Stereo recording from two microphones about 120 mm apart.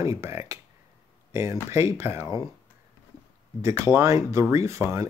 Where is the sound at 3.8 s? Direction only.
25° right (ahead or behind).